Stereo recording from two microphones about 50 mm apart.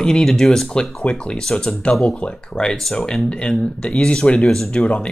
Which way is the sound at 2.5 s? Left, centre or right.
Centre.